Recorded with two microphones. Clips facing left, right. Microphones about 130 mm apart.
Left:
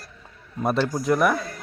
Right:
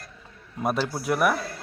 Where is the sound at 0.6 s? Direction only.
5° right (ahead or behind).